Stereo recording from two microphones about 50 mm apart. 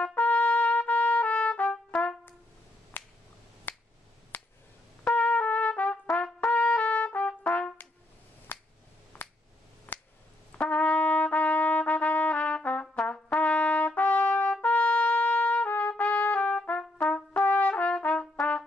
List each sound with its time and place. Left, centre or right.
0.0 s trumpet: left
2.9 s finger snapping: left
5.0 s trumpet: left
8.5 s finger snapping: left
9.9 s finger snapping: left
10.7 s trumpet: left